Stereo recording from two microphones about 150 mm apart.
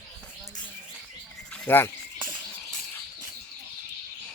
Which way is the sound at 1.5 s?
10° left (ahead or behind).